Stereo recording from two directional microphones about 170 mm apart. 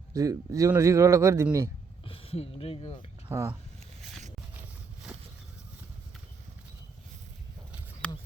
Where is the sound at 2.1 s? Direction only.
35° left (ahead or behind).